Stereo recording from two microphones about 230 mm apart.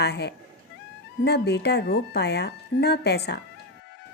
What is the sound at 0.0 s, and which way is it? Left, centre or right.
A woman's voice, left.